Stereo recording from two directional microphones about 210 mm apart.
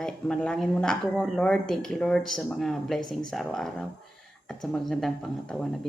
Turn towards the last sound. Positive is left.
turn(degrees=0)  # may be behind; listen again after turning